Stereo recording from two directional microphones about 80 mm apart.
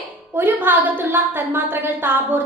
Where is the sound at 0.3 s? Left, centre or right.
Right.